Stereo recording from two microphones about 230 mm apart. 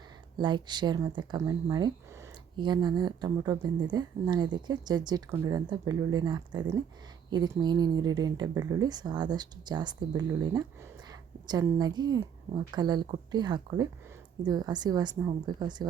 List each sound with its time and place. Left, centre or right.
0.3 s a woman's voice: centre